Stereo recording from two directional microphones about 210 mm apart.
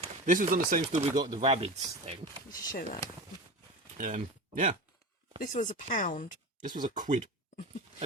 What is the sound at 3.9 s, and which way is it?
Speech, 40° right (ahead or behind).